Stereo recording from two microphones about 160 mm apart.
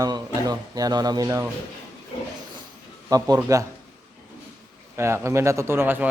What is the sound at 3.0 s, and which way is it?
Speech, 20° right (ahead or behind).